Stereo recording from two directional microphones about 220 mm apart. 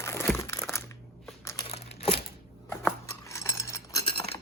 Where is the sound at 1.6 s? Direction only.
30° left (ahead or behind).